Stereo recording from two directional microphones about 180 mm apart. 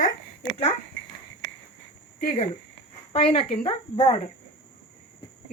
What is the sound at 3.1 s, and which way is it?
A woman's voice, 30° left (ahead or behind).